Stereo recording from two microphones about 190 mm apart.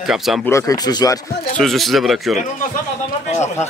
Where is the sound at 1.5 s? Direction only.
Centre (ahead or behind).